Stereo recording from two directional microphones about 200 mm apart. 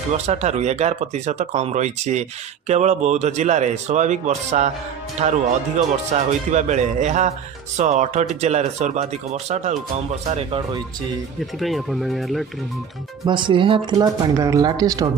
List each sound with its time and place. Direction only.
0.1 s speech: 35° right (ahead or behind)
11.6 s speech: centre (ahead or behind)
13.2 s speech: 25° right (ahead or behind)